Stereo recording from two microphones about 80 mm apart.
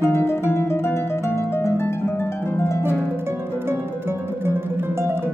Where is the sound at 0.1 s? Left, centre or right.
Left.